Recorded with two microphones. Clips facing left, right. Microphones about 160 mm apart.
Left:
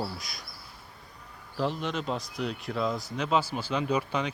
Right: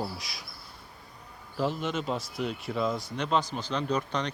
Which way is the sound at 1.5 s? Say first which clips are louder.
Right 1 dB; centre (ahead or behind).